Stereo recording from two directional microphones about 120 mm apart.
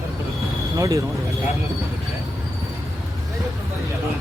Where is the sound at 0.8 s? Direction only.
25° right (ahead or behind).